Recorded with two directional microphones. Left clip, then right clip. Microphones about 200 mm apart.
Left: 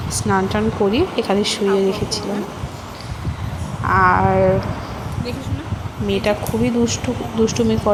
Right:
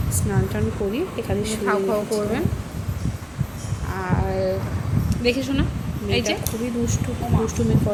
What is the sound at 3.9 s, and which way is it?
Speech, centre (ahead or behind).